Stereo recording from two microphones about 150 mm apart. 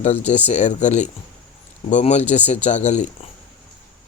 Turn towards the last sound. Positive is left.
turn(degrees=50)  # may be behind; listen again after turning